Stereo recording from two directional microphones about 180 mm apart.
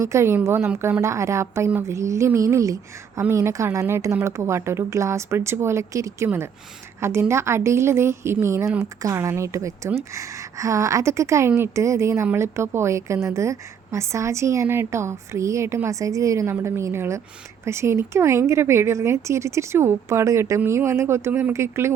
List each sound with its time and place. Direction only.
0.0 s a woman's voice: 15° right (ahead or behind)